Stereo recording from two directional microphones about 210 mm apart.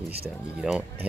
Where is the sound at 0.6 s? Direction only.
5° right (ahead or behind).